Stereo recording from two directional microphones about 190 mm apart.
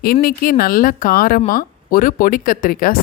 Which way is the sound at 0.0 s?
55° left (ahead or behind).